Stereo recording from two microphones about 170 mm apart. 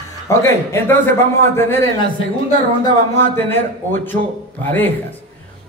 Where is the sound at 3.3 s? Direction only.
10° left (ahead or behind).